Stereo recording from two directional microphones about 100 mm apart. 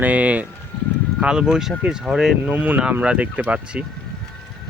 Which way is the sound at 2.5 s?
15° right (ahead or behind).